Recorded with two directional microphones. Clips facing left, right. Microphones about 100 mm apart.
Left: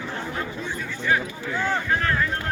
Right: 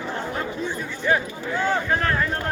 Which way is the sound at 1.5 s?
Centre (ahead or behind).